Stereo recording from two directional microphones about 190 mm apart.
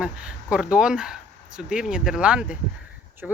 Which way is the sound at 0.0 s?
5° right (ahead or behind).